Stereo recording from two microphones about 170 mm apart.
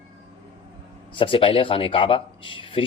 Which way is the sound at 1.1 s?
30° left (ahead or behind).